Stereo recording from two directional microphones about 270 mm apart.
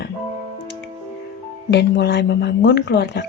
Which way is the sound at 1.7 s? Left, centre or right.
Left.